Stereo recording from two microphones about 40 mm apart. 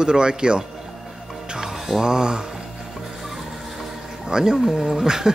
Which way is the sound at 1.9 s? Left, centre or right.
Centre.